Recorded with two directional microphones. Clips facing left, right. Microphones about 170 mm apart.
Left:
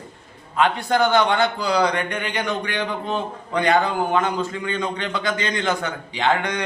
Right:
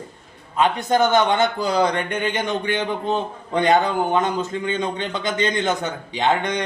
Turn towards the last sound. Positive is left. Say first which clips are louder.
# right 1 dB
turn(degrees=-20)  # may be behind; listen again after turning